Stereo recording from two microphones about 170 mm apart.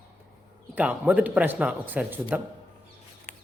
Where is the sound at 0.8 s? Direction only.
10° right (ahead or behind).